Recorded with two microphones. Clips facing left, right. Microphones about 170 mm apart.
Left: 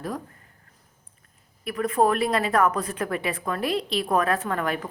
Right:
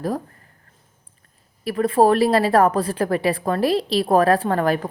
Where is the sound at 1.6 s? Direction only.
30° right (ahead or behind).